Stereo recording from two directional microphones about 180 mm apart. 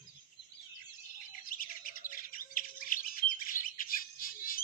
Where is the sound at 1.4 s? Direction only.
50° left (ahead or behind).